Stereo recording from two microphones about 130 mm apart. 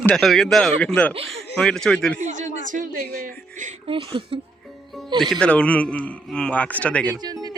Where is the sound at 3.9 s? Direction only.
40° right (ahead or behind).